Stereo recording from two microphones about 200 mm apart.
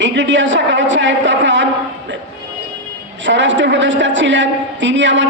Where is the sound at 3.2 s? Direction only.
65° right (ahead or behind).